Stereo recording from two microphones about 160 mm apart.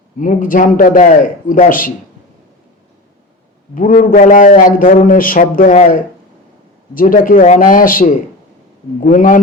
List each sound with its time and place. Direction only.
0.2 s a man's voice: 55° left (ahead or behind)
3.8 s a man's voice: 60° left (ahead or behind)